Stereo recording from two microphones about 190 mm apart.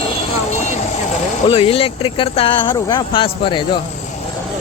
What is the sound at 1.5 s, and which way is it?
Speech, 30° left (ahead or behind).